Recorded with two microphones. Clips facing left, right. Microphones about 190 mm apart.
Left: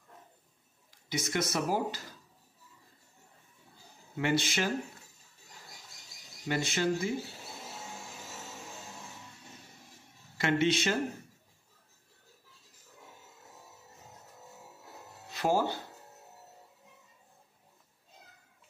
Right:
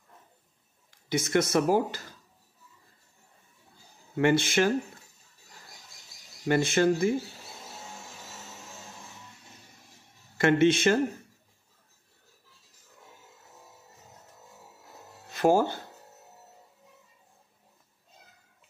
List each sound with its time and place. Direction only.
1.0 s speech: 55° right (ahead or behind)
4.2 s speech: 55° right (ahead or behind)
6.4 s speech: 50° right (ahead or behind)
10.3 s speech: 50° right (ahead or behind)
15.3 s speech: 50° right (ahead or behind)